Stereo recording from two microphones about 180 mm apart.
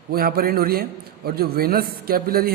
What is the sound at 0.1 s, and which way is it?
A man's voice, 55° right (ahead or behind).